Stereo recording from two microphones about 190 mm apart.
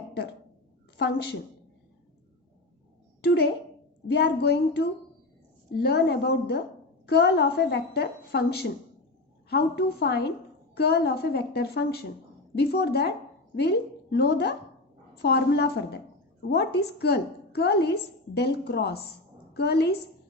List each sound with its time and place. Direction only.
3.2 s a woman's voice: 55° left (ahead or behind)